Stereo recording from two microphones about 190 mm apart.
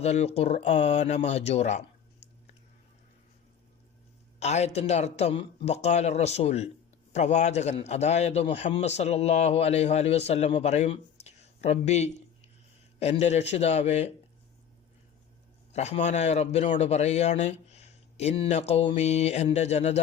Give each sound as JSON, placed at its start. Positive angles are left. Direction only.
{"t": 0.0, "sound": "a man's voice", "side_deg": 35}
{"t": 4.4, "sound": "a man's voice", "side_deg": 35}
{"t": 15.7, "sound": "a man's voice", "side_deg": 35}